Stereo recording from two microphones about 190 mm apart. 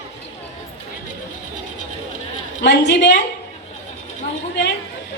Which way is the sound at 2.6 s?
65° left (ahead or behind).